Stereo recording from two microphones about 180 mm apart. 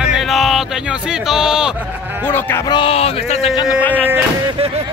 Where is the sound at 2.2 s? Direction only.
10° left (ahead or behind).